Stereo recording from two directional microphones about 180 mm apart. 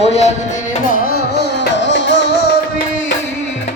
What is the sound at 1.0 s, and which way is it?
Music, 65° left (ahead or behind).